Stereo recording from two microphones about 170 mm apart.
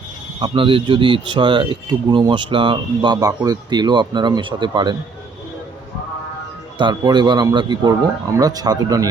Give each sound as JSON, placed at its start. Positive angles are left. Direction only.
{"t": 0.3, "sound": "speech", "side_deg": -30}
{"t": 6.7, "sound": "speech", "side_deg": -25}